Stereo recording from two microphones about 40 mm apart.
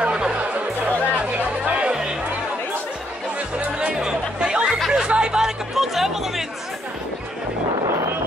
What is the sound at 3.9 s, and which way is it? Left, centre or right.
Music, centre.